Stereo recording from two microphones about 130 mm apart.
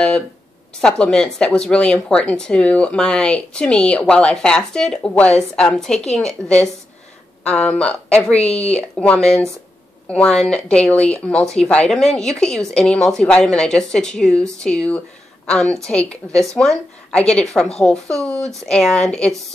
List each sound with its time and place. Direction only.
0.7 s speech: 5° left (ahead or behind)
7.4 s speech: 10° left (ahead or behind)
8.5 s speech: 55° left (ahead or behind)
8.9 s a woman's voice: 10° left (ahead or behind)